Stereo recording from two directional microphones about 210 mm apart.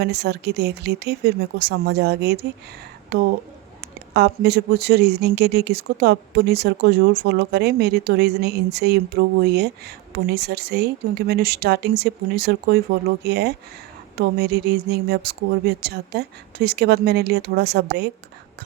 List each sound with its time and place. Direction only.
0.0 s speech: 50° right (ahead or behind)